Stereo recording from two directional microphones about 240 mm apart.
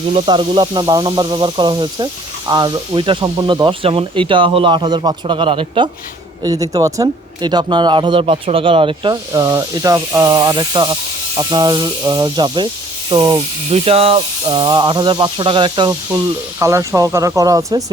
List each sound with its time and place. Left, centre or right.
0.1 s speech: right